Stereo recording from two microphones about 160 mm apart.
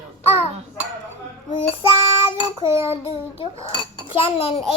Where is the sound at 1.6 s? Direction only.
35° left (ahead or behind).